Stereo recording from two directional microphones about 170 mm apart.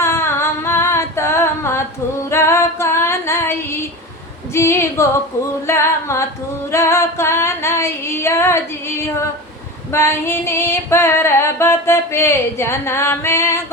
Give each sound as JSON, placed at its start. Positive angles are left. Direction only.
{"t": 0.0, "sound": "a sound", "side_deg": 15}
{"t": 2.3, "sound": "female singing", "side_deg": 15}
{"t": 4.5, "sound": "singing", "side_deg": 15}